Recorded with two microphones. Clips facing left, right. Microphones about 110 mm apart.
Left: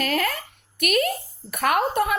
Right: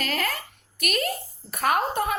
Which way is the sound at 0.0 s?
45° left (ahead or behind).